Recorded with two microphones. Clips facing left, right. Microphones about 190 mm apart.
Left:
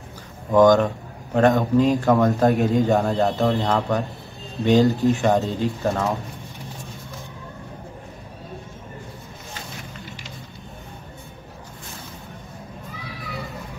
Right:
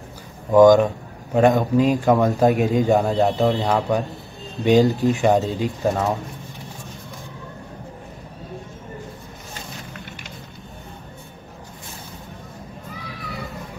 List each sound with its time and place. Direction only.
0.5 s speech: 10° right (ahead or behind)